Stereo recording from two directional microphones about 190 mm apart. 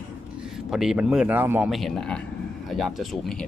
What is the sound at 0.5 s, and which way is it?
Speech, centre (ahead or behind).